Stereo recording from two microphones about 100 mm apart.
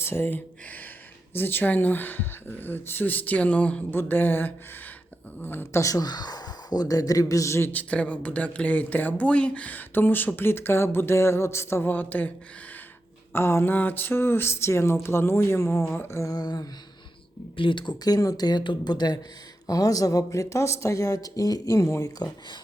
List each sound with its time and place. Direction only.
0.0 s a sound: 25° left (ahead or behind)
1.3 s speech: 20° left (ahead or behind)
5.8 s speech: 40° left (ahead or behind)
7.7 s speech: 15° left (ahead or behind)
13.3 s speech: 25° left (ahead or behind)
16.3 s speech: 40° left (ahead or behind)
17.6 s speech: 55° left (ahead or behind); by 22.1 s 30° left (ahead or behind)